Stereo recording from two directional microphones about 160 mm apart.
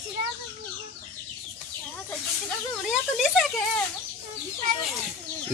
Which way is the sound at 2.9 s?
Centre (ahead or behind).